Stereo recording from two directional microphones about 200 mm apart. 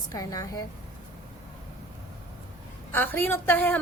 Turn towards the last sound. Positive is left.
turn(degrees=10)  # may be behind; listen again after turning